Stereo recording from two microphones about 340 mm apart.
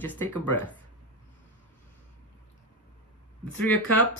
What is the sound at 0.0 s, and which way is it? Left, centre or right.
Speech, centre.